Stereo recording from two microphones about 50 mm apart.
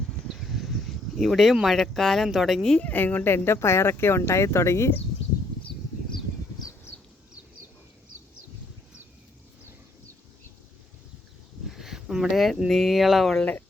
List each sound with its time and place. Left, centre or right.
0.3 s a sound: centre
1.6 s speech: centre
2.8 s speech: left
11.7 s speech: centre